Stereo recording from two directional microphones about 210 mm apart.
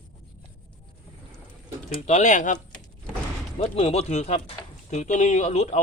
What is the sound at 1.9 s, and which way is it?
Speech, 30° left (ahead or behind).